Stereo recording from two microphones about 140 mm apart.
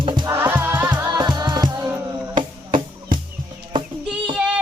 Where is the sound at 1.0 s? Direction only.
30° right (ahead or behind).